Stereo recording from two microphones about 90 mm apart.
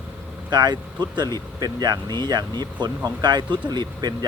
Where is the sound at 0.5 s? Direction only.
55° right (ahead or behind).